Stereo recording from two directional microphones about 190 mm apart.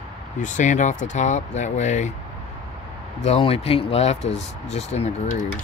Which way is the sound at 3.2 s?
30° left (ahead or behind).